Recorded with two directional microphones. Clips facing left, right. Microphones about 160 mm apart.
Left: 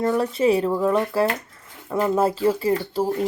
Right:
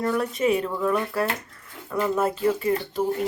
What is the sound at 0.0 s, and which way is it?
Speech, 30° left (ahead or behind).